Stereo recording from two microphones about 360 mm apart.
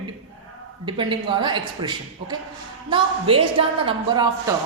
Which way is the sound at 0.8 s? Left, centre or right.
Centre.